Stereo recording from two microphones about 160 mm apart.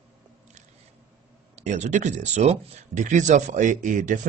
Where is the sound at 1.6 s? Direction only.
50° right (ahead or behind).